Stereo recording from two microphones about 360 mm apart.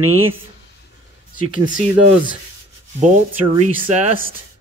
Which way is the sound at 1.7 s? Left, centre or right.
Right.